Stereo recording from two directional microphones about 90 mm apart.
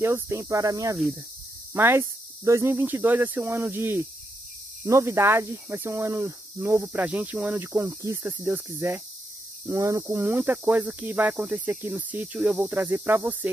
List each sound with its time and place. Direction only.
0.0 s speech: 30° right (ahead or behind)
1.7 s speech: 25° right (ahead or behind)
6.9 s cricket: 15° right (ahead or behind)
7.9 s speech: 25° right (ahead or behind)
9.7 s speech: 40° right (ahead or behind)
10.0 s speech: 25° right (ahead or behind)
12.7 s speech: 25° right (ahead or behind)